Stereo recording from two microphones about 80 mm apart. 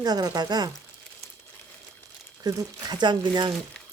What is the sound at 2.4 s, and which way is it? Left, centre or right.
Speech, right.